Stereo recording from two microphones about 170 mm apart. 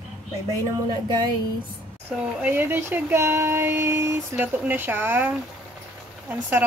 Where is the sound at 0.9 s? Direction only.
25° right (ahead or behind).